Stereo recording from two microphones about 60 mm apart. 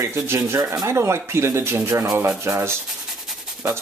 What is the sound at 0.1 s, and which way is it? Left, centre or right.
Speech, right.